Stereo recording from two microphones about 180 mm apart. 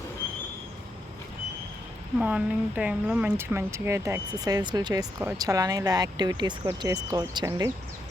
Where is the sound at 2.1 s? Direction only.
5° right (ahead or behind).